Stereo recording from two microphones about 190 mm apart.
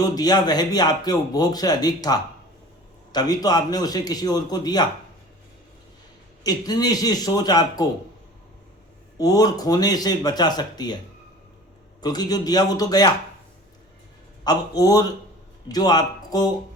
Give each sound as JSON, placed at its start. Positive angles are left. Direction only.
{"t": 0.0, "sound": "speech", "side_deg": 20}
{"t": 6.4, "sound": "speech", "side_deg": 20}
{"t": 9.1, "sound": "speech", "side_deg": 20}
{"t": 12.0, "sound": "speech", "side_deg": 20}
{"t": 14.4, "sound": "speech", "side_deg": 20}